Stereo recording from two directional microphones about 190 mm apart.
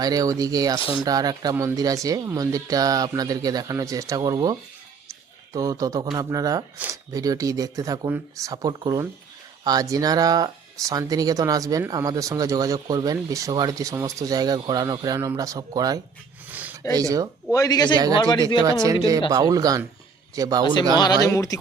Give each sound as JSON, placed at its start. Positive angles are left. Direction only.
{"t": 0.0, "sound": "speech", "side_deg": -20}
{"t": 0.8, "sound": "speech", "side_deg": 25}
{"t": 1.0, "sound": "speech", "side_deg": -20}
{"t": 5.5, "sound": "speech", "side_deg": -20}
{"t": 16.5, "sound": "a sound", "side_deg": -10}
{"t": 16.9, "sound": "speech", "side_deg": -20}
{"t": 17.5, "sound": "speech", "side_deg": 20}
{"t": 18.6, "sound": "speech", "side_deg": -20}
{"t": 20.9, "sound": "speech", "side_deg": 20}